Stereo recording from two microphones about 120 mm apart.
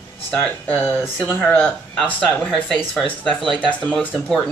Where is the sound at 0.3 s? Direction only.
10° left (ahead or behind).